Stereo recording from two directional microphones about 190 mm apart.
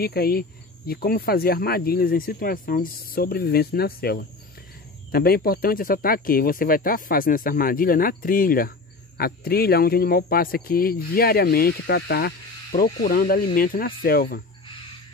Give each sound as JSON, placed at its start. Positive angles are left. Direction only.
{"t": 0.0, "sound": "speech", "side_deg": 55}